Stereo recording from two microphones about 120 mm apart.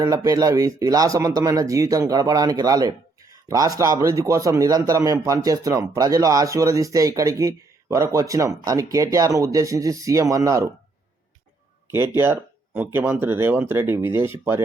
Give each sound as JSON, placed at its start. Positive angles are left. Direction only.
{"t": 0.0, "sound": "a man's voice", "side_deg": -25}
{"t": 11.9, "sound": "a man's voice", "side_deg": -20}